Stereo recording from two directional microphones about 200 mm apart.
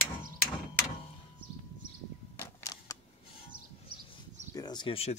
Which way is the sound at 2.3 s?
15° left (ahead or behind).